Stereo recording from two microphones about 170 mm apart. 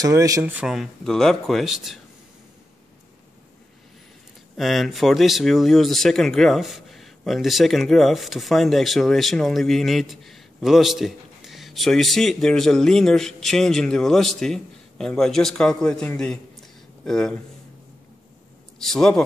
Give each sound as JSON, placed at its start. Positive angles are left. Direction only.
{"t": 0.0, "sound": "speech", "side_deg": -20}
{"t": 4.6, "sound": "speech", "side_deg": 0}
{"t": 18.8, "sound": "speech", "side_deg": 5}